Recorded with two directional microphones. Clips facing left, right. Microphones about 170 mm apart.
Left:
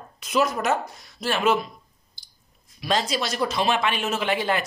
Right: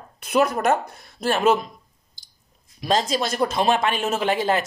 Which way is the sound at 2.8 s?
45° right (ahead or behind).